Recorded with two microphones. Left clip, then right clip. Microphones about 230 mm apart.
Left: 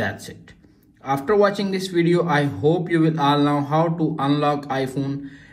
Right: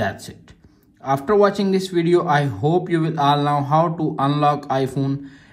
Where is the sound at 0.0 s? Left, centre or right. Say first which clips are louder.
Right 2 dB; right.